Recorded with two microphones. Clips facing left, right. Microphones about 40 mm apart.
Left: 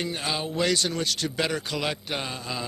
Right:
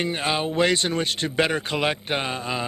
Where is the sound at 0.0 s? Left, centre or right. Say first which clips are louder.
Right 5 dB; right.